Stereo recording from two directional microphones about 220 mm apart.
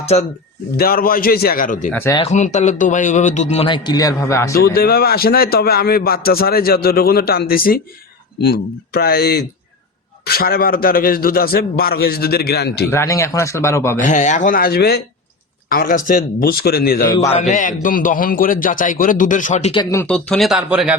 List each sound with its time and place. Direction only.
0.0 s speech: 30° left (ahead or behind)
0.8 s a man's voice: 40° left (ahead or behind)
1.9 s a man's voice: 10° left (ahead or behind)
2.1 s a man's voice: 30° left (ahead or behind); by 4.5 s 15° left (ahead or behind)
4.5 s a man's voice: 45° left (ahead or behind)
12.9 s a man's voice: 10° left (ahead or behind)
14.0 s a man's voice: 35° left (ahead or behind)
17.1 s a man's voice: 20° left (ahead or behind)
17.3 s a man's voice: 35° left (ahead or behind); by 20.9 s 5° right (ahead or behind)